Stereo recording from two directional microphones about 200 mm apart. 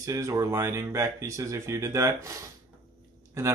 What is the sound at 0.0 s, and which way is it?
Speech, 15° right (ahead or behind).